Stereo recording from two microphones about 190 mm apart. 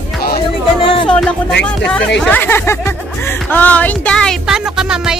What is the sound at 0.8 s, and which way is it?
Music, 25° left (ahead or behind).